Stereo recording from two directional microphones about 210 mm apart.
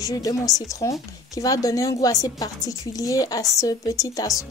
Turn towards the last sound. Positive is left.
turn(degrees=15)  # may be behind; listen again after turning